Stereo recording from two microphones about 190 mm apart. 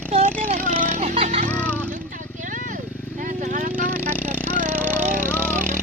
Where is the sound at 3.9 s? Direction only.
10° right (ahead or behind).